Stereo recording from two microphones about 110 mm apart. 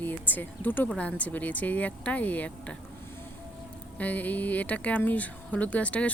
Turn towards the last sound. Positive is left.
turn(degrees=10)  # may be behind; listen again after turning